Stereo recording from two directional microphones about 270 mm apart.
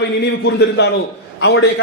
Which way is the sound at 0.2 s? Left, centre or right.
Left.